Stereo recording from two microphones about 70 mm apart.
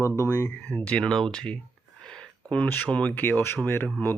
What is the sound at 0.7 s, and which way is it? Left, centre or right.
Speech, centre.